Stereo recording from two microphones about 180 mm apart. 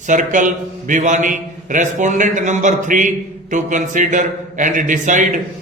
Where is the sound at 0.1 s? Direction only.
45° right (ahead or behind).